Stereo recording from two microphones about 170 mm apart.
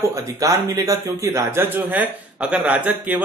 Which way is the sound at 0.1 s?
20° right (ahead or behind).